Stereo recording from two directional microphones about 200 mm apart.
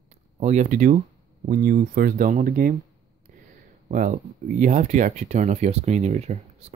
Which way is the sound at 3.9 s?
40° right (ahead or behind).